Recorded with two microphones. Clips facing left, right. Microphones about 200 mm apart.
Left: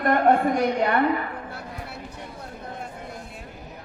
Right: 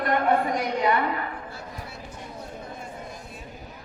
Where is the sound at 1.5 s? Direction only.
60° left (ahead or behind).